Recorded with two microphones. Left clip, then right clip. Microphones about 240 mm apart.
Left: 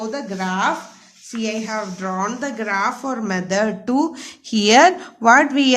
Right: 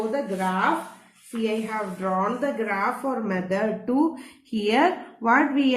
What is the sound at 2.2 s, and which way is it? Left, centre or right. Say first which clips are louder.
A woman's voice: left 1 dB; left.